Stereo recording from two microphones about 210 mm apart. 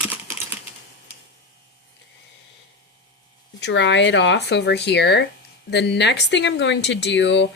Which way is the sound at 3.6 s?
60° left (ahead or behind).